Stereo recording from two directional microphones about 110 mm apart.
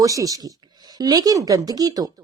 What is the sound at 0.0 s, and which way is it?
A woman's voice, 30° right (ahead or behind).